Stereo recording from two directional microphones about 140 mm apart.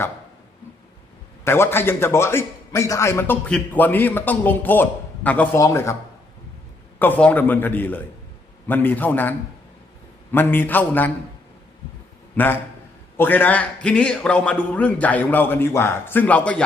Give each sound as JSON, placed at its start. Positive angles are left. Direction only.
{"t": 1.5, "sound": "a man's voice", "side_deg": 15}
{"t": 5.5, "sound": "speech", "side_deg": 20}
{"t": 7.0, "sound": "a man's voice", "side_deg": 10}
{"t": 10.3, "sound": "a man's voice", "side_deg": 15}
{"t": 13.1, "sound": "a man's voice", "side_deg": 15}